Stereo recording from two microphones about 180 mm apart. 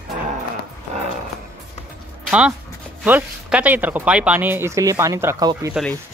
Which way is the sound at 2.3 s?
5° right (ahead or behind).